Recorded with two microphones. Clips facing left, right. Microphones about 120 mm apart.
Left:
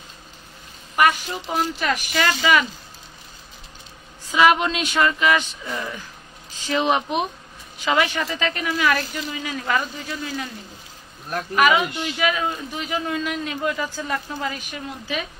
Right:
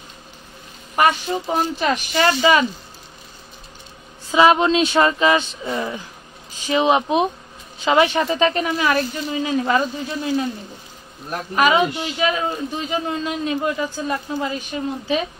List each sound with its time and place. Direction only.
0.9 s speech: 30° right (ahead or behind)
4.3 s a man's voice: 25° right (ahead or behind)
6.6 s a man's voice: 15° right (ahead or behind)
11.5 s a man's voice: 30° right (ahead or behind)